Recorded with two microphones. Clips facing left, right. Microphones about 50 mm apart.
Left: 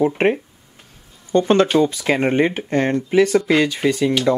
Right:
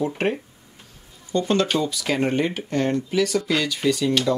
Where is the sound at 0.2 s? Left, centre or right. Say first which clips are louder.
Left 6 dB; left.